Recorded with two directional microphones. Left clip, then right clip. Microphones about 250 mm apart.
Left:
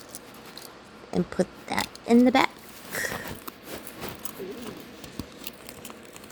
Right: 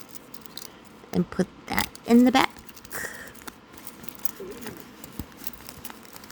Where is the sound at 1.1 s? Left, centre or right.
Right.